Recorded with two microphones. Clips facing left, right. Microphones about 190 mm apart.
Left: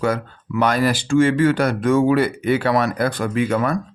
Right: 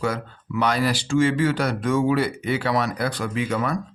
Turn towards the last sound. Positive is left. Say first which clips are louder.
# left 5 dB
turn(degrees=55)  # may be behind; listen again after turning